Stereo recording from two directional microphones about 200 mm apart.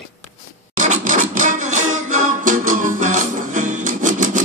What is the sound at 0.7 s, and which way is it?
Music, 40° right (ahead or behind).